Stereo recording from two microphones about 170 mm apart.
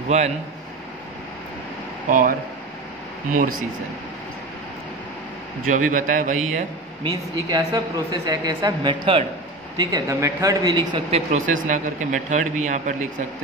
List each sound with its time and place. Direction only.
0.1 s speech: 40° right (ahead or behind)
2.0 s a man's voice: 55° right (ahead or behind)
5.7 s a man's voice: 50° right (ahead or behind)
7.4 s a woman's voice: 20° right (ahead or behind)
11.1 s a man's voice: 40° right (ahead or behind)